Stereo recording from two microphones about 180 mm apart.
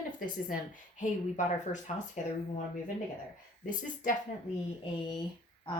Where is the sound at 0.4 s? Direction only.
45° left (ahead or behind).